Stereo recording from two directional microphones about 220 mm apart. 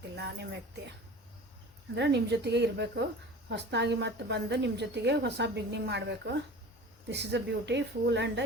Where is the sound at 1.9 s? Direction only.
50° right (ahead or behind).